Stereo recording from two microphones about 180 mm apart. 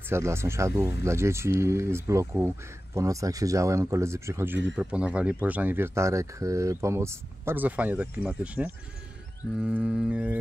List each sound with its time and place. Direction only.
0.1 s speech: 15° right (ahead or behind)